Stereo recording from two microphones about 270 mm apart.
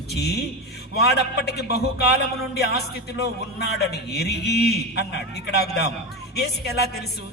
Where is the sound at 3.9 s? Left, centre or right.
Left.